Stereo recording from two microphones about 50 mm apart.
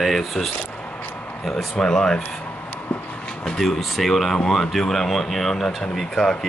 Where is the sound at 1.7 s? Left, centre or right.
Centre.